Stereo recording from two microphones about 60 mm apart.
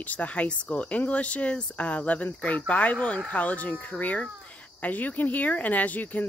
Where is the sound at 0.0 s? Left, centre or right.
Left.